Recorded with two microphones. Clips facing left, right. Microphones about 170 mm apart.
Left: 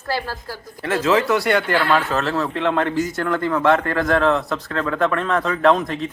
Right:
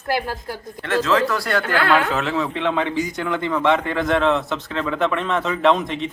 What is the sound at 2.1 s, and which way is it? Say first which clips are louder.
A woman's voice: left 1 dB; centre (ahead or behind).